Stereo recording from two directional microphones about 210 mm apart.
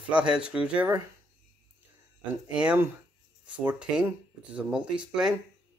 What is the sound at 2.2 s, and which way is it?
Speech, 5° right (ahead or behind).